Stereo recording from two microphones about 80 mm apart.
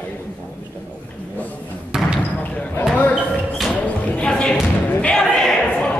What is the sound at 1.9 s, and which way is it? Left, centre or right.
Basketball bounce, centre.